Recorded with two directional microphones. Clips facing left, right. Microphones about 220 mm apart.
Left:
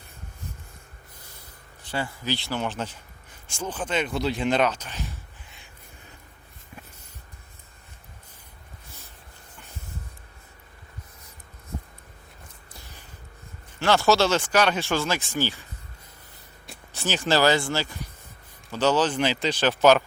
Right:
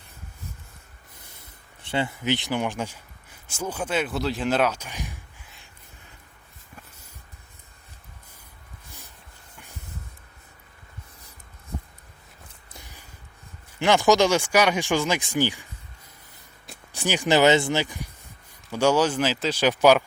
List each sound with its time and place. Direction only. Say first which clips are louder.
1.4 s speech: left 2 dB; 25° right (ahead or behind)
12.8 s music: left 1 dB; 10° right (ahead or behind)
13.7 s speech: right 2 dB; 15° right (ahead or behind)
16.9 s speech: right 2 dB; 15° right (ahead or behind)